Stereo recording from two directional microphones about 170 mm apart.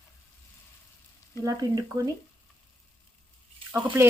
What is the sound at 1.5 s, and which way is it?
Speech, 20° right (ahead or behind).